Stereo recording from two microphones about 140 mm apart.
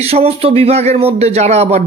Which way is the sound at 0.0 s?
45° right (ahead or behind).